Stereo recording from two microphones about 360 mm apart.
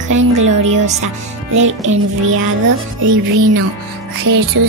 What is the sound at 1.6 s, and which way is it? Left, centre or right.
Speech, right.